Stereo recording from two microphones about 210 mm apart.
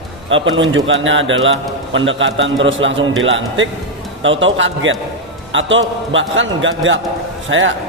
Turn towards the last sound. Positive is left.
turn(degrees=-65)  # may be behind; listen again after turning